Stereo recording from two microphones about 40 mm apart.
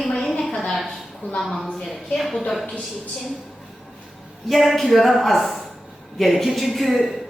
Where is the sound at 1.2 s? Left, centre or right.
Left.